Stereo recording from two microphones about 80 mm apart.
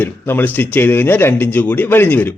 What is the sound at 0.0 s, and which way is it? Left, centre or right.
Speech, left.